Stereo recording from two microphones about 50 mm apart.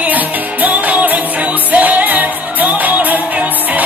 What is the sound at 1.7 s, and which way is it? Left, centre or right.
Music, right.